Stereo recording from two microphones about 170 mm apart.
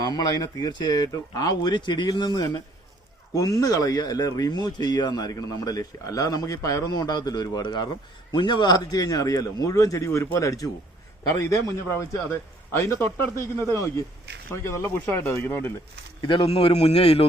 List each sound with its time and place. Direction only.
0.0 s a man's voice: 25° left (ahead or behind)
16.2 s a man's voice: 30° left (ahead or behind)